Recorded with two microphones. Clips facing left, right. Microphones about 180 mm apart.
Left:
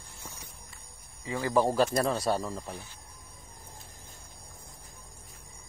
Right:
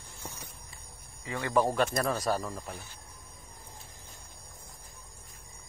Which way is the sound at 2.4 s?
Centre (ahead or behind).